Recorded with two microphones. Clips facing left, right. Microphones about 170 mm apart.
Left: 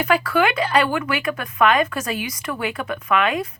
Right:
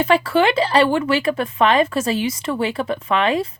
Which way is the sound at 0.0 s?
25° right (ahead or behind).